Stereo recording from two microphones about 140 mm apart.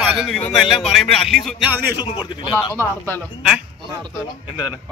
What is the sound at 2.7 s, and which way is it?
Speech, 15° left (ahead or behind).